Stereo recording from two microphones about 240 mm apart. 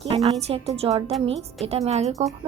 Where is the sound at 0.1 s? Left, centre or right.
Right.